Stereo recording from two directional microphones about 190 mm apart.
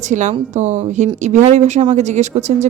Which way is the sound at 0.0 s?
40° right (ahead or behind).